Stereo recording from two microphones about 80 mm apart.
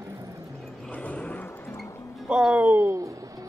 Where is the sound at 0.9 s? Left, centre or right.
Centre.